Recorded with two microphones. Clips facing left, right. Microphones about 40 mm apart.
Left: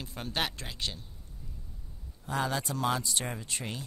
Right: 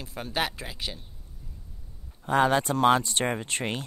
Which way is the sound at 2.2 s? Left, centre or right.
Right.